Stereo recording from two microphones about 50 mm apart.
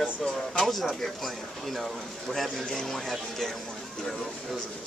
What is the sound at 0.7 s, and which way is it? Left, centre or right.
Speech, centre.